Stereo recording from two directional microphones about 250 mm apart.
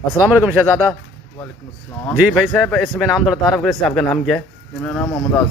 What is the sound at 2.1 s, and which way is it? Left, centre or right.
A man's voice, centre.